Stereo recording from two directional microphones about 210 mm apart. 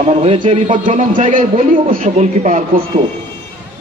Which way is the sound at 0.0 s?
30° right (ahead or behind).